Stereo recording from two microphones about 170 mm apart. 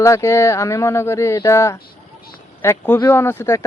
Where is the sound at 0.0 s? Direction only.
15° left (ahead or behind).